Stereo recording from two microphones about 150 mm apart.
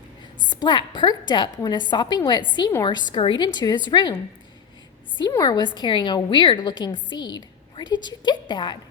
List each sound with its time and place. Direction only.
0.5 s a woman's voice: 30° left (ahead or behind)
5.4 s a woman's voice: 30° left (ahead or behind)